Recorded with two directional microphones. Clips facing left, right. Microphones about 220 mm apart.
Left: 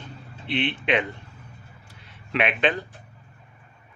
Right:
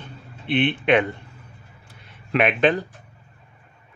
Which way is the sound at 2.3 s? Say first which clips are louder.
Right 5 dB; 45° right (ahead or behind).